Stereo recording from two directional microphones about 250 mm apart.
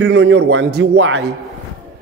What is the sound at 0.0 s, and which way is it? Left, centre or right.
Speech, right.